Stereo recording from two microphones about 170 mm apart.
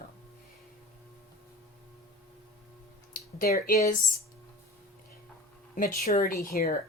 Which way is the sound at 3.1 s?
60° left (ahead or behind).